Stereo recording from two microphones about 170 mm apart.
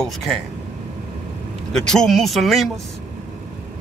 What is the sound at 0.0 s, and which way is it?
Speech, centre (ahead or behind).